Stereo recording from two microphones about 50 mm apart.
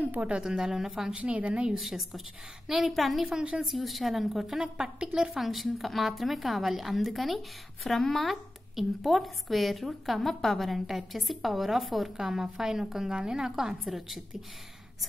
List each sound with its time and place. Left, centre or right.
0.2 s a woman's voice: centre
1.1 s a woman's voice: right
1.8 s a woman's voice: centre